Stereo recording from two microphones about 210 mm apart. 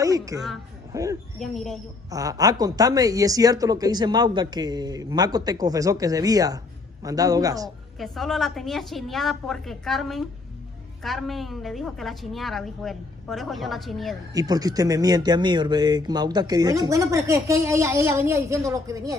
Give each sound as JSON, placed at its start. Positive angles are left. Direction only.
{"t": 0.0, "sound": "a sound", "side_deg": -15}
{"t": 0.9, "sound": "speech", "side_deg": -15}
{"t": 1.4, "sound": "a woman's voice", "side_deg": 0}
{"t": 2.0, "sound": "speech", "side_deg": -15}
{"t": 8.0, "sound": "a woman's voice", "side_deg": 0}
{"t": 14.3, "sound": "speech", "side_deg": -15}